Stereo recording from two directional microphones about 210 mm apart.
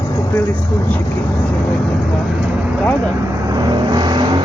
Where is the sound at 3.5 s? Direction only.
20° right (ahead or behind).